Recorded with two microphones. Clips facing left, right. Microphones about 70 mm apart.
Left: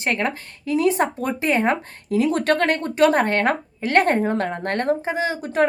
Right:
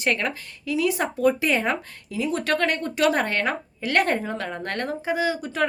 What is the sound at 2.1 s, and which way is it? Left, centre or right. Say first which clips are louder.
Speech: left 6 dB; left.